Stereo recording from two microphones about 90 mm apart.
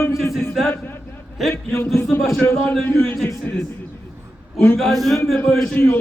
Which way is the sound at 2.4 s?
15° left (ahead or behind).